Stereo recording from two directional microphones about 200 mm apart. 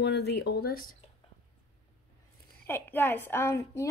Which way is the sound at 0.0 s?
55° left (ahead or behind).